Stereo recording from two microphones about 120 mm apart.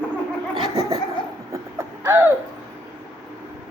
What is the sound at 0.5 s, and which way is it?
Laughter, 30° right (ahead or behind).